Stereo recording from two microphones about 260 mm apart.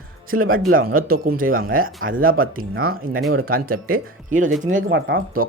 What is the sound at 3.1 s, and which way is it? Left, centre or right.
Speech, right.